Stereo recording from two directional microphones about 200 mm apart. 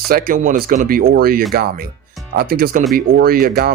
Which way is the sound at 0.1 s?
45° right (ahead or behind).